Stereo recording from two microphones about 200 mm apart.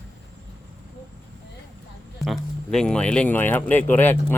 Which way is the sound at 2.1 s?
Centre (ahead or behind).